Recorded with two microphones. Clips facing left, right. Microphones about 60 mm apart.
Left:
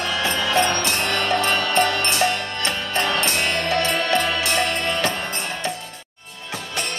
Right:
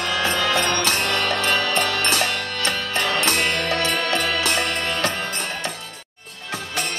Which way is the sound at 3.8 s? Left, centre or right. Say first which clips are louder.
Left 2 dB; left.